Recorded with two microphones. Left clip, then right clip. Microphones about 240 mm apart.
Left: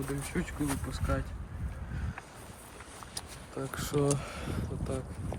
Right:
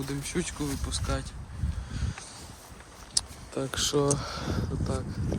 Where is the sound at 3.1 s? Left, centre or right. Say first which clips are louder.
Right 10 dB; right.